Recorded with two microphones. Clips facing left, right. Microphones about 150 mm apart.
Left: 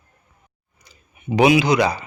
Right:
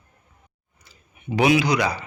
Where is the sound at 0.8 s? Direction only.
15° left (ahead or behind).